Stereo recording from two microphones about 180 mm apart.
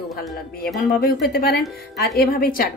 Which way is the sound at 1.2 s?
55° left (ahead or behind).